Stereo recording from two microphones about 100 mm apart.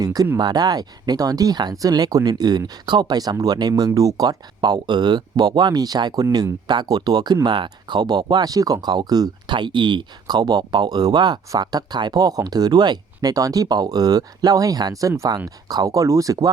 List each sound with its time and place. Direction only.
0.0 s speech: 40° right (ahead or behind)